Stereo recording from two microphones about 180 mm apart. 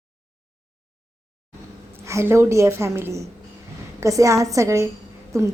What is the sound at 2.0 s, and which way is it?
A woman's voice, 15° right (ahead or behind).